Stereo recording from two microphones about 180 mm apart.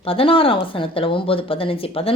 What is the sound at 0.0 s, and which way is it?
Speech, 30° left (ahead or behind).